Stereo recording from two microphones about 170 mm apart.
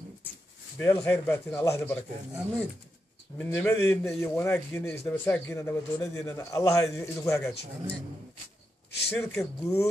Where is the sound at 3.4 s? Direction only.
15° left (ahead or behind).